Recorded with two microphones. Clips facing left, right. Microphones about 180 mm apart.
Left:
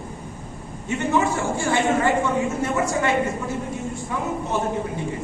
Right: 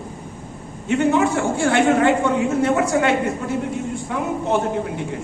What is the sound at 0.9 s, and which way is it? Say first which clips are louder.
A man's voice: right 4 dB; 70° right (ahead or behind).